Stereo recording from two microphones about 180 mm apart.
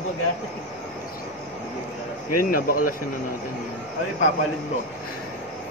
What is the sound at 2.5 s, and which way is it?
Speech, 50° left (ahead or behind).